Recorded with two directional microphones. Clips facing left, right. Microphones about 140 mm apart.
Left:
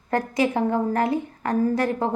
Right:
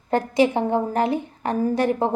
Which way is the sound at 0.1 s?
25° right (ahead or behind).